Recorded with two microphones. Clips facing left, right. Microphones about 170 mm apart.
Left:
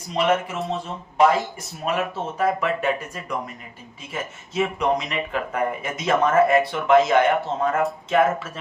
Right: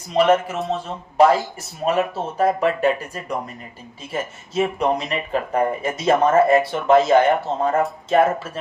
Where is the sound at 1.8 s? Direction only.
35° right (ahead or behind).